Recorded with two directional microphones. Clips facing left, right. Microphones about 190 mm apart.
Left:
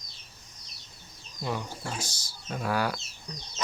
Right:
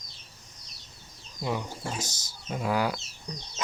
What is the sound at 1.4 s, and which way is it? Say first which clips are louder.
Speech: right 2 dB; 15° right (ahead or behind).